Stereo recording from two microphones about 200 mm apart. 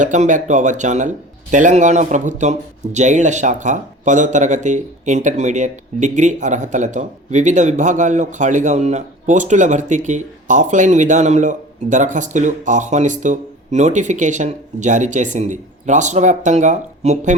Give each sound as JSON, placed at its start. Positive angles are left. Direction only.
{"t": 0.0, "sound": "speech", "side_deg": -40}